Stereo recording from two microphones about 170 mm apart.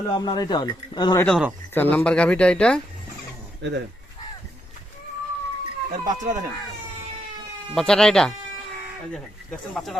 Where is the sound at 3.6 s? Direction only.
90° right.